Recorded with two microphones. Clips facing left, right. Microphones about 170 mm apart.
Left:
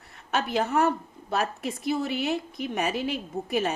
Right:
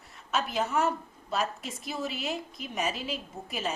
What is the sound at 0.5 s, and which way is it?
Speech, 65° left (ahead or behind).